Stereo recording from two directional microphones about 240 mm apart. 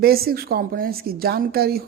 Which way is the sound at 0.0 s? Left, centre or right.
Right.